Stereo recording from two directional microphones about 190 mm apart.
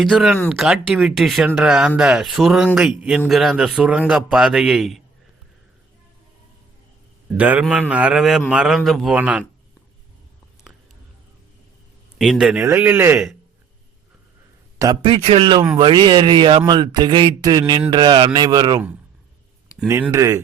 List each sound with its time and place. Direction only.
0.0 s speech: centre (ahead or behind)
7.3 s speech: 5° right (ahead or behind)
12.2 s speech: centre (ahead or behind)
14.8 s speech: 25° right (ahead or behind)
19.9 s speech: 15° right (ahead or behind)